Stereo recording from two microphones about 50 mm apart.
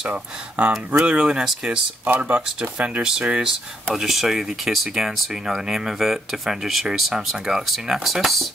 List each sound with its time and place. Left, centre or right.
0.1 s speech: right
1.0 s speech: centre
2.0 s speech: right
3.0 s speech: centre
3.9 s speech: centre